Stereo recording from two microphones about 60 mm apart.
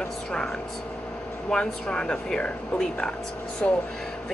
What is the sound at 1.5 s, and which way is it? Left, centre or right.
Speech, centre.